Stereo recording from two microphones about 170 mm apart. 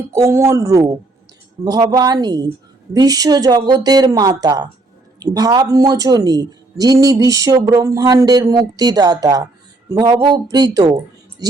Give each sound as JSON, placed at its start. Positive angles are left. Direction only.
{"t": 0.1, "sound": "speech", "side_deg": -15}